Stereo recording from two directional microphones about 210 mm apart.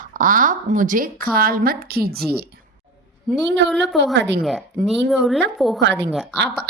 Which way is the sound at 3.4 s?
55° right (ahead or behind).